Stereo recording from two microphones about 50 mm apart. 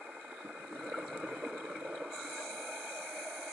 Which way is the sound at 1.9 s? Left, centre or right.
Centre.